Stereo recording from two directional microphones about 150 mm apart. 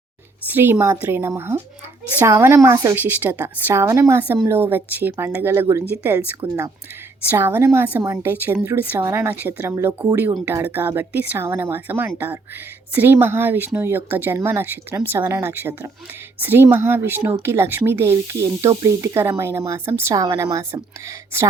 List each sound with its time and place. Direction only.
0.4 s speech: 15° right (ahead or behind)